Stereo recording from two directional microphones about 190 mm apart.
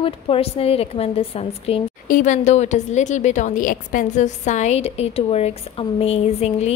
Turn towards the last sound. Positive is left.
turn(degrees=35)  # may be behind; listen again after turning